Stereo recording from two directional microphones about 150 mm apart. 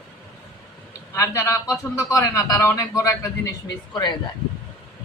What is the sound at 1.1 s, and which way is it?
A man's voice, 20° left (ahead or behind).